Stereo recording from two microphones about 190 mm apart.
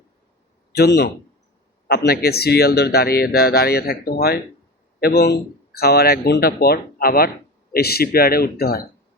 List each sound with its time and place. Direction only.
0.7 s a man's voice: 60° left (ahead or behind)